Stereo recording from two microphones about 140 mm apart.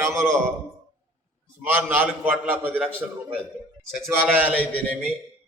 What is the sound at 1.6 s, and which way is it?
A man's voice, 15° right (ahead or behind).